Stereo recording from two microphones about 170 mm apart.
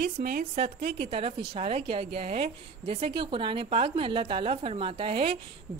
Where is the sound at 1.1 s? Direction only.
35° right (ahead or behind).